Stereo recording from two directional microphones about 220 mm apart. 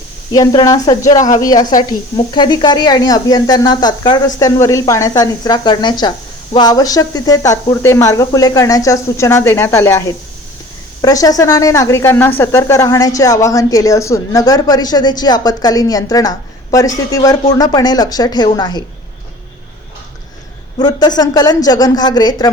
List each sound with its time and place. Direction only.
0.3 s speech: 15° left (ahead or behind)
11.0 s speech: 15° left (ahead or behind)
20.7 s speech: 20° left (ahead or behind)